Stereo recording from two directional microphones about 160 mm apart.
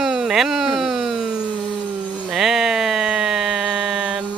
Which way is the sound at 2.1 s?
Centre (ahead or behind).